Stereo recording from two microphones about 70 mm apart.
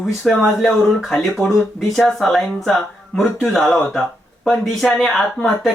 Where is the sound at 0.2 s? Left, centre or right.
Centre.